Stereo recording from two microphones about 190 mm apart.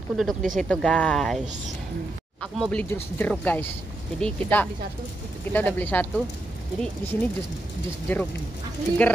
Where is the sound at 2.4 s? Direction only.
5° left (ahead or behind).